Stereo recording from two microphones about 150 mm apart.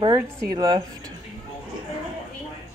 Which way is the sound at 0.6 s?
30° right (ahead or behind).